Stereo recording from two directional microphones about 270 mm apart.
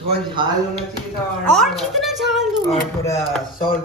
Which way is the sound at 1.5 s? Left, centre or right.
Centre.